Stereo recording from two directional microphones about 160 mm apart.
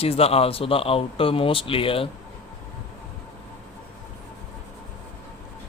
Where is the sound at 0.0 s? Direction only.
40° left (ahead or behind).